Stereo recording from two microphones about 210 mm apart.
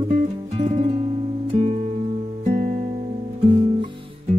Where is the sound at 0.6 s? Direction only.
30° right (ahead or behind).